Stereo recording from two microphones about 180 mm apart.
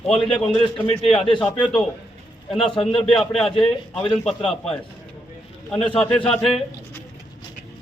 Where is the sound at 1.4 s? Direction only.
5° left (ahead or behind).